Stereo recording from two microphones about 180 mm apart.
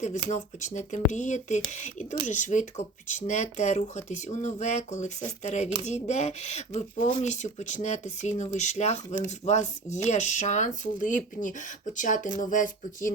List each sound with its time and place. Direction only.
0.3 s speech: 45° left (ahead or behind)